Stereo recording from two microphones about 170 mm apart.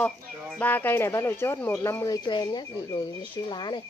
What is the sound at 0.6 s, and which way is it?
Speech, 10° left (ahead or behind).